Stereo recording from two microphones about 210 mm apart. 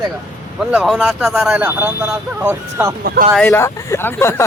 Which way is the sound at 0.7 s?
Centre (ahead or behind).